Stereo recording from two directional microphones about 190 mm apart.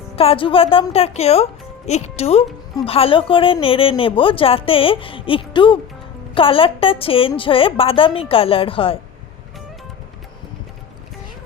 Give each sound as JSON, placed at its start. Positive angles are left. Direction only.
{"t": 0.2, "sound": "a woman's voice", "side_deg": 30}